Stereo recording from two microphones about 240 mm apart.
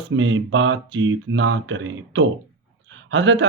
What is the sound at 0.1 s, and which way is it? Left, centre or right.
Speech, right.